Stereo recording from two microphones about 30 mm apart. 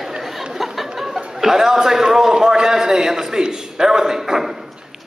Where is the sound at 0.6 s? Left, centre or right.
Centre.